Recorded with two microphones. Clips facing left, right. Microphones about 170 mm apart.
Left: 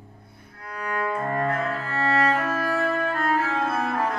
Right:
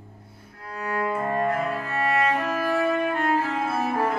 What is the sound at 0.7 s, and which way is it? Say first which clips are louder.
Cello: right 1 dB; 20° right (ahead or behind).